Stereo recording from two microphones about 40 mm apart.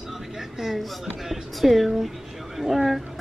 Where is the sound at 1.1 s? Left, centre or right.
Centre.